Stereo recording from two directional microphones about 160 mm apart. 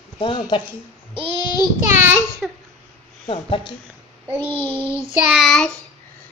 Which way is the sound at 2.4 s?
5° right (ahead or behind).